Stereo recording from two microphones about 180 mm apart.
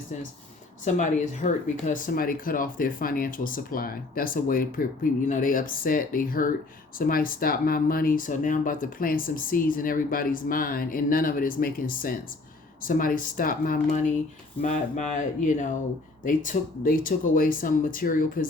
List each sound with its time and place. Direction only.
0.9 s speech: 45° left (ahead or behind)